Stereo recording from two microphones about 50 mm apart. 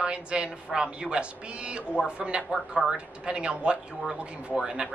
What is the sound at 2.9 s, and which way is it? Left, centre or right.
Speech, right.